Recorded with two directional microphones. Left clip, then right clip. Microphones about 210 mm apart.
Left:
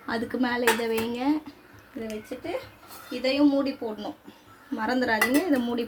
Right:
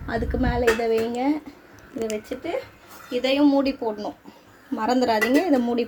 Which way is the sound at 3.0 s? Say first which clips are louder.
Right 3 dB; 35° right (ahead or behind).